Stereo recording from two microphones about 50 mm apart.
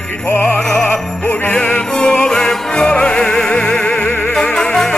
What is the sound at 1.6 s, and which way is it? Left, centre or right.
Music, left.